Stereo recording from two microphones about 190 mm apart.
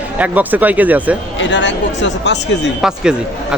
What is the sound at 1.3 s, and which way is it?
Speech, 75° left (ahead or behind).